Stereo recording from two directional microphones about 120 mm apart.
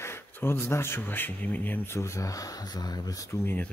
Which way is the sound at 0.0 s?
20° left (ahead or behind).